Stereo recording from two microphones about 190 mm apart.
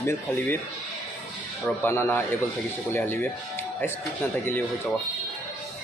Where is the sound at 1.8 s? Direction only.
10° left (ahead or behind).